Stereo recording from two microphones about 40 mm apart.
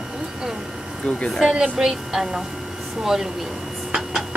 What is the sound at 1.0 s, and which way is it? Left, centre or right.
Speech, left.